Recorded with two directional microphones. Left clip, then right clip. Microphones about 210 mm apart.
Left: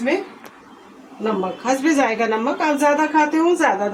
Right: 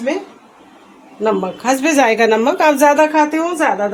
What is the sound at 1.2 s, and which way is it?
Speech, 50° right (ahead or behind).